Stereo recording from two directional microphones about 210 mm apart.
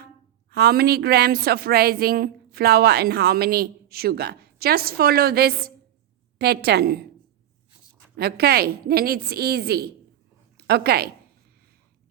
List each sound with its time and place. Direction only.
0.5 s a woman's voice: 50° right (ahead or behind)
8.1 s a woman's voice: 50° right (ahead or behind)